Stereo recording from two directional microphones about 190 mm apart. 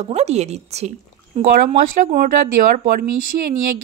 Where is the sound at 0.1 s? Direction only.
35° right (ahead or behind).